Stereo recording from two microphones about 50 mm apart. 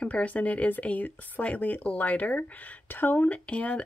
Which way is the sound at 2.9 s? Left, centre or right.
Left.